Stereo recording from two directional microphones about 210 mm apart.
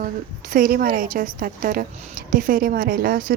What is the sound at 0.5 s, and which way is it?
A woman's voice, 40° right (ahead or behind).